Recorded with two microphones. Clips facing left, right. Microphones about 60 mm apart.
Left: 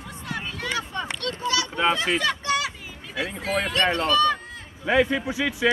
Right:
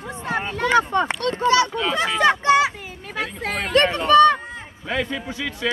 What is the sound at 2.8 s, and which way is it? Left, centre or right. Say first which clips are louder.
Children playing: right 2 dB; right.